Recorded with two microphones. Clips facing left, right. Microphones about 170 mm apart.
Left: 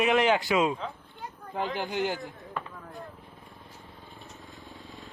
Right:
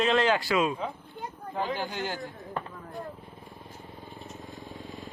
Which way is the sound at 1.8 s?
15° left (ahead or behind).